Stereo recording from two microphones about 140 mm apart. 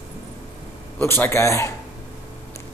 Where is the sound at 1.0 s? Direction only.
15° left (ahead or behind).